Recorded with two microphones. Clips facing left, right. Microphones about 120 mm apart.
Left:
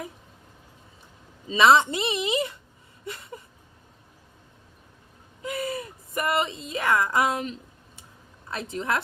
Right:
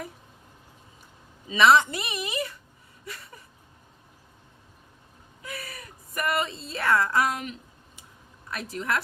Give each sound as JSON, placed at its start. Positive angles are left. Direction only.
{"t": 1.5, "sound": "a woman's voice", "side_deg": 25}
{"t": 3.0, "sound": "a sound", "side_deg": 25}
{"t": 5.4, "sound": "a woman's voice", "side_deg": 20}